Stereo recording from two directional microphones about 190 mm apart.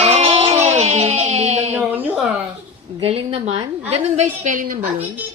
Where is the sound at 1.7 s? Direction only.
10° right (ahead or behind).